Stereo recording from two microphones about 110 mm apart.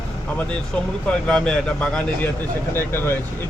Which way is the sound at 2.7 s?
20° left (ahead or behind).